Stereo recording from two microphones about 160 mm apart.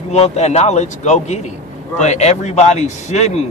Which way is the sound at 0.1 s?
45° left (ahead or behind).